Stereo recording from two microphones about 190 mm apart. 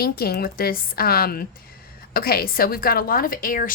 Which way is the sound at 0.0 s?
55° left (ahead or behind).